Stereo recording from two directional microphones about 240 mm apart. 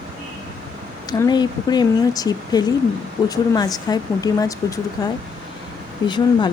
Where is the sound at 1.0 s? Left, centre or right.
Centre.